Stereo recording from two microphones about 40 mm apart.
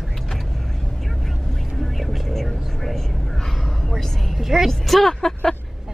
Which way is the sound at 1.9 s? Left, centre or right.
Centre.